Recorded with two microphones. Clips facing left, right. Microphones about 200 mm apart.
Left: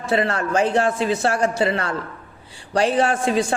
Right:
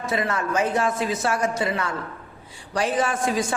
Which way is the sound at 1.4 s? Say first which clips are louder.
Left 4 dB; 65° left (ahead or behind).